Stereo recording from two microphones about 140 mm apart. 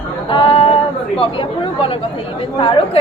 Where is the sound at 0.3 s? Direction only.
40° left (ahead or behind).